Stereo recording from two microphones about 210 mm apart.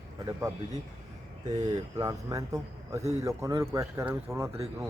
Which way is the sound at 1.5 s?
20° right (ahead or behind).